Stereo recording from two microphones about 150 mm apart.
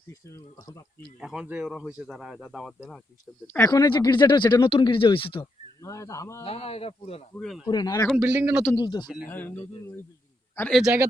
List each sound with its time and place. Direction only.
0.1 s speech: 20° left (ahead or behind)
1.2 s speech: 5° right (ahead or behind)
3.7 s speech: 25° left (ahead or behind)
5.8 s speech: 20° left (ahead or behind)
6.4 s speech: 40° left (ahead or behind)
7.3 s speech: centre (ahead or behind)
7.7 s speech: 30° left (ahead or behind)
8.1 s a man's voice: 5° right (ahead or behind)
8.7 s speech: 25° left (ahead or behind)
9.3 s speech: 15° left (ahead or behind)
10.7 s speech: centre (ahead or behind)